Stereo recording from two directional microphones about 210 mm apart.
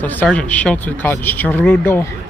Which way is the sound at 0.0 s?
10° left (ahead or behind).